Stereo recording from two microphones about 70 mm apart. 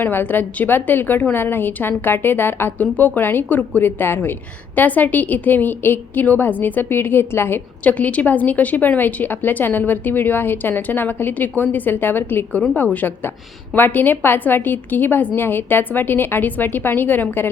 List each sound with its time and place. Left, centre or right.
0.0 s a woman's voice: left
7.9 s a woman's voice: left